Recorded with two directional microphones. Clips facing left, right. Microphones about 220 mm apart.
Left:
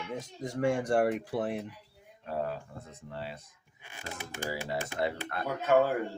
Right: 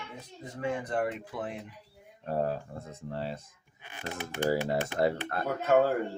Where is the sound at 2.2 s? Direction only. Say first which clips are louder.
Right 4 dB; 40° right (ahead or behind).